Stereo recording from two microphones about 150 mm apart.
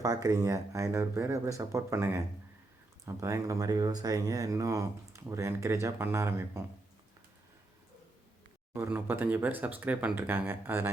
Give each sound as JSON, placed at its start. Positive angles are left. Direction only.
{"t": 0.0, "sound": "speech", "side_deg": -25}
{"t": 8.7, "sound": "speech", "side_deg": -15}